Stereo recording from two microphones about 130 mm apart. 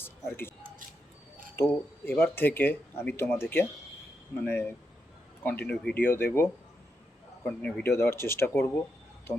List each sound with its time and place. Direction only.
0.0 s a sound: 15° left (ahead or behind)
1.6 s speech: 20° left (ahead or behind)
7.6 s speech: 15° left (ahead or behind)